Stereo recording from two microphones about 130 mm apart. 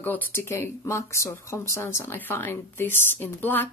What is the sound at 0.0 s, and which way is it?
Speech, 15° left (ahead or behind).